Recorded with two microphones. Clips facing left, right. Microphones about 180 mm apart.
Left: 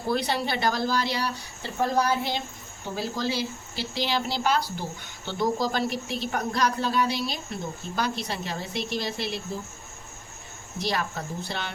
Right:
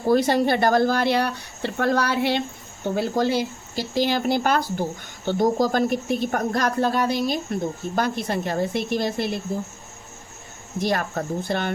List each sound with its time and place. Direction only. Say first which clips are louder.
0.1 s speech: right 8 dB; 45° right (ahead or behind); by 2.4 s 70° right (ahead or behind)
2.8 s speech: right 7 dB; 60° right (ahead or behind)
10.8 s speech: right 5 dB; 50° right (ahead or behind)